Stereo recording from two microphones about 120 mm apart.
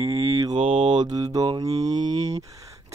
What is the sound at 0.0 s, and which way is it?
Speech, 55° right (ahead or behind).